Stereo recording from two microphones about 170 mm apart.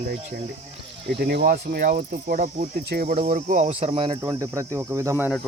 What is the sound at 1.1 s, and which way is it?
Cricket, 65° right (ahead or behind).